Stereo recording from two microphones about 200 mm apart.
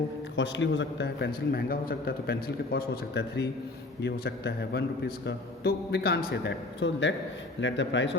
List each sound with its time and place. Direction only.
0.3 s a man's voice: 65° left (ahead or behind)